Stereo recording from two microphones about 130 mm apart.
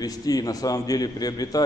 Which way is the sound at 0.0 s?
30° left (ahead or behind).